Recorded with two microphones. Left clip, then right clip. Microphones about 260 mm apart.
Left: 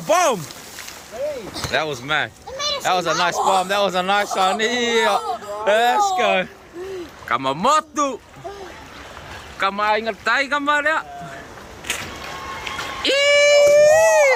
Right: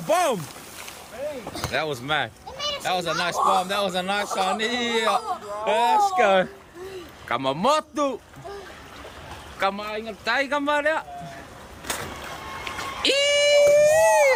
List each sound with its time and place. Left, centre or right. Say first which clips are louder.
0.1 s speech: left 5 dB; centre
1.7 s speech: left 4 dB; centre
6.1 s speech: left 1 dB; centre
9.6 s speech: left 7 dB; centre
11.9 s vehicle: left 4 dB; right
12.6 s a sound: left 2 dB; centre